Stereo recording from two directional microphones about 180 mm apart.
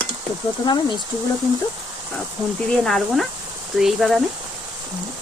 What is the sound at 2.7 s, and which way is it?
Speech, centre (ahead or behind).